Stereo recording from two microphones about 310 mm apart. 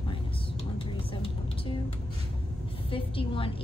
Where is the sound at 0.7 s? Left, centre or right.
Centre.